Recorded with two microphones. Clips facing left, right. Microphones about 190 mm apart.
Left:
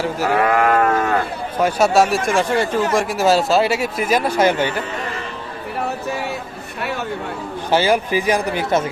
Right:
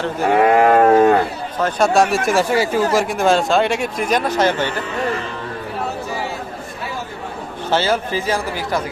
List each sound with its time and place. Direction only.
0.3 s speech: 30° right (ahead or behind)
1.5 s speech: 10° left (ahead or behind)
7.7 s speech: 15° left (ahead or behind)